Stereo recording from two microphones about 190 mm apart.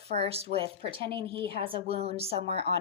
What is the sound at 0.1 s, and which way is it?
A woman's voice, 30° right (ahead or behind).